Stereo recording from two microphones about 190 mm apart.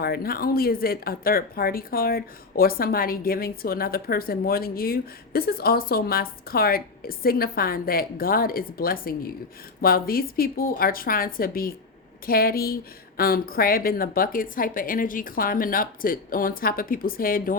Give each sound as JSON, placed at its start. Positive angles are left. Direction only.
{"t": 0.0, "sound": "speech", "side_deg": 55}